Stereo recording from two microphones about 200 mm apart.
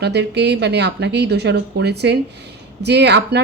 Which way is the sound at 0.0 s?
55° right (ahead or behind).